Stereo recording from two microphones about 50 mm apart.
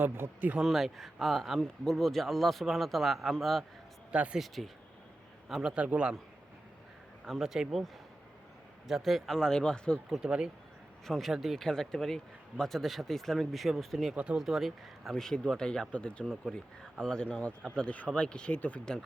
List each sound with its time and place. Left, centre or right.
0.2 s speech: right
0.6 s speech: centre
4.1 s a man's voice: right
4.4 s a man's voice: centre
5.7 s a man's voice: right
7.3 s speech: centre
8.9 s speech: centre
10.2 s speech: centre
11.0 s speech: centre
11.5 s speech: centre
15.1 s speech: centre
17.7 s speech: left